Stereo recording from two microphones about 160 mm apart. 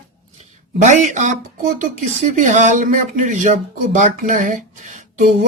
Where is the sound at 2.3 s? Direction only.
50° right (ahead or behind).